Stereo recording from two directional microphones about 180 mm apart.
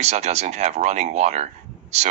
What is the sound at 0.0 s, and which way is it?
Speech, 35° right (ahead or behind).